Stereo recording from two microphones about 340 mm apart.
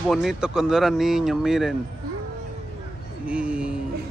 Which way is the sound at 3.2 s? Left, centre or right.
Centre.